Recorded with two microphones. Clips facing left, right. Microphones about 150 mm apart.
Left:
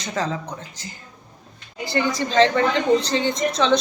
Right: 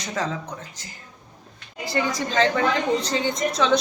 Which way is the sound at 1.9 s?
Centre (ahead or behind).